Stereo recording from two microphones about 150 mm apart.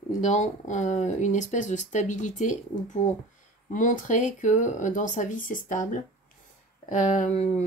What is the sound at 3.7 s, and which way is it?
Speech, 60° left (ahead or behind).